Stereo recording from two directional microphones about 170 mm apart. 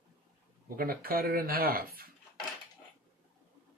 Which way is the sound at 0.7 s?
60° right (ahead or behind).